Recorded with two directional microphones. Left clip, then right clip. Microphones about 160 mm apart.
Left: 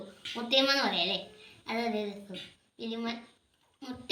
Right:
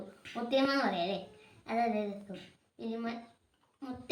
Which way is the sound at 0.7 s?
20° right (ahead or behind).